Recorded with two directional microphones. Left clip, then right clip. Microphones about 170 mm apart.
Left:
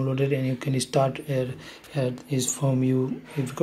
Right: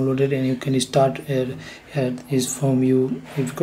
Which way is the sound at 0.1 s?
25° left (ahead or behind).